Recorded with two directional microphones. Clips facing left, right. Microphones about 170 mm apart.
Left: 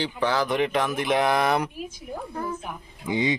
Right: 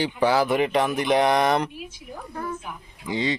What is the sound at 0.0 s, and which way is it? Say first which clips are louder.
Speech: right 4 dB; 10° right (ahead or behind).